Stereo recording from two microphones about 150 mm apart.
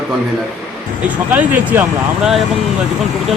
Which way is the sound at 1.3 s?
10° right (ahead or behind).